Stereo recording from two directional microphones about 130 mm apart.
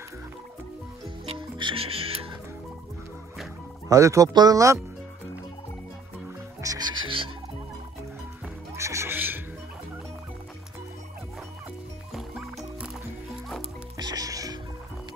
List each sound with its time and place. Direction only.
1.2 s music: 45° right (ahead or behind)
3.9 s speech: 25° right (ahead or behind)
6.6 s music: 30° right (ahead or behind)
8.7 s music: 20° right (ahead or behind)
12.1 s music: centre (ahead or behind)
13.9 s music: 30° right (ahead or behind)